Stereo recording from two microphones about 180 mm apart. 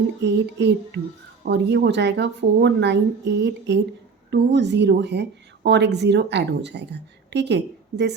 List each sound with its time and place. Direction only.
0.2 s a woman's voice: 75° right (ahead or behind)